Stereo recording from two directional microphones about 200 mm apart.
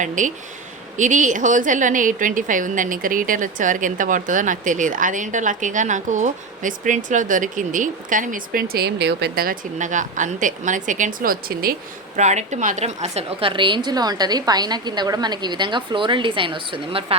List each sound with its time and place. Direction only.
0.0 s a woman's voice: 40° right (ahead or behind)